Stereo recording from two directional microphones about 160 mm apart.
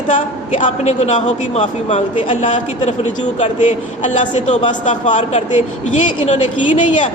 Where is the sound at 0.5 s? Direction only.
45° left (ahead or behind).